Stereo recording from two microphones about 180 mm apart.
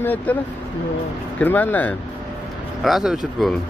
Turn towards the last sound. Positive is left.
turn(degrees=0)  # may be behind; listen again after turning